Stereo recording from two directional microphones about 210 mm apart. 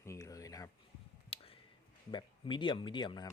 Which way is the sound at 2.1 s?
20° left (ahead or behind).